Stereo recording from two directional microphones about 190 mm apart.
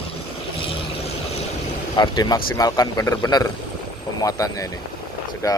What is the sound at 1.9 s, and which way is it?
A man's voice, 20° left (ahead or behind).